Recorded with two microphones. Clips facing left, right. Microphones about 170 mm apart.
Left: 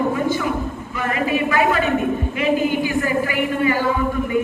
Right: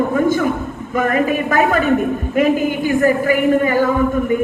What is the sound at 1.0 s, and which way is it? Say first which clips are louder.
A woman's voice: right 5 dB; 45° right (ahead or behind).